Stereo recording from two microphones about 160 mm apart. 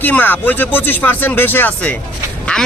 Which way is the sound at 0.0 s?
10° left (ahead or behind).